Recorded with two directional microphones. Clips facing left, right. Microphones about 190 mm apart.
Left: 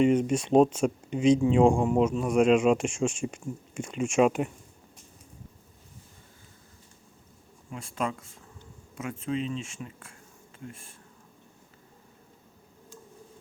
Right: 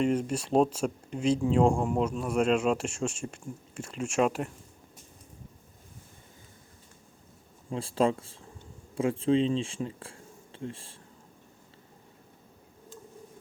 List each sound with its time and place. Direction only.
0.0 s speech: 5° left (ahead or behind)
7.7 s speech: 30° right (ahead or behind)